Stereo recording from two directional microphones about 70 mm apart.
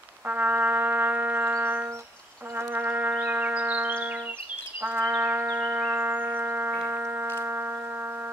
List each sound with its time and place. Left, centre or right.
0.3 s brass instrument: right
1.5 s music: right
5.0 s music: right
5.6 s a sound: right